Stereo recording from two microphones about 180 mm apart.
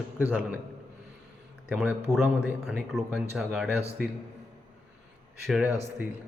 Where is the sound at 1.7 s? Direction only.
5° right (ahead or behind).